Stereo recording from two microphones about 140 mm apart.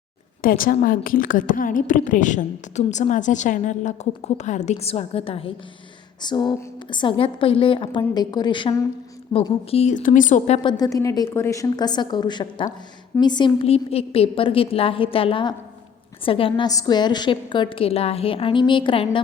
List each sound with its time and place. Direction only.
0.4 s a woman's voice: 90° left; by 5.5 s 45° left (ahead or behind)
6.2 s a woman's voice: 30° left (ahead or behind)
9.6 s speech: 45° left (ahead or behind)
9.9 s a woman's voice: 70° left (ahead or behind)
10.6 s a woman's voice: 30° left (ahead or behind)
16.6 s a woman's voice: 30° left (ahead or behind)